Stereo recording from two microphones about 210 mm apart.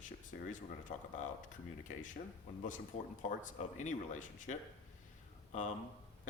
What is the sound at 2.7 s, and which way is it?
Speech, 40° left (ahead or behind).